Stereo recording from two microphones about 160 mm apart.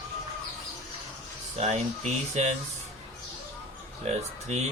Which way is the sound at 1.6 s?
45° right (ahead or behind).